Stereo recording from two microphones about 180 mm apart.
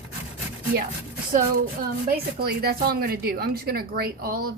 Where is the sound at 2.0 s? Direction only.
60° right (ahead or behind).